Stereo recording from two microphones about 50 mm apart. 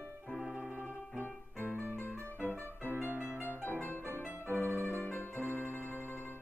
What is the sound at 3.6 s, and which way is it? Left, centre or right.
Music, left.